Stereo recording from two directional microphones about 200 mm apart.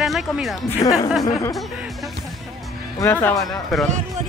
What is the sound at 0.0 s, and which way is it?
Speech, centre (ahead or behind).